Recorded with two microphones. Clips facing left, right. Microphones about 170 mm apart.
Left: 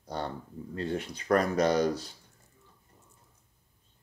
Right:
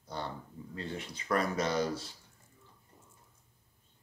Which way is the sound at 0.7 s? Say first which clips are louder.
Left 7 dB; 60° left (ahead or behind).